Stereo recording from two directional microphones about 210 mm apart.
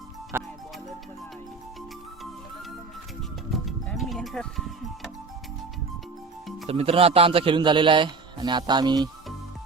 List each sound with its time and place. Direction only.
0.3 s music: 10° right (ahead or behind)
3.5 s music: centre (ahead or behind)
6.7 s a man's voice: 30° right (ahead or behind)